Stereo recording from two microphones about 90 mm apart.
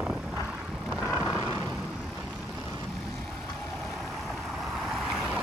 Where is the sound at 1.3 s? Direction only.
30° right (ahead or behind).